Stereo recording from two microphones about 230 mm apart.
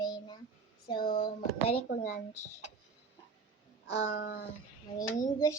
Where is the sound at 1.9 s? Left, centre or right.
Left.